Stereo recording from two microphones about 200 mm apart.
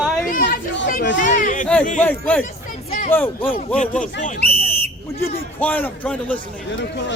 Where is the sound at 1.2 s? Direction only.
40° left (ahead or behind).